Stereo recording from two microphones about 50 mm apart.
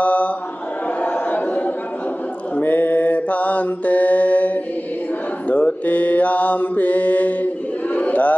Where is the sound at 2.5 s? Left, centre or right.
Left.